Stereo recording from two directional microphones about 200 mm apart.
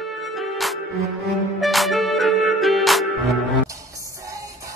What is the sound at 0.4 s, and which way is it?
Music, centre (ahead or behind).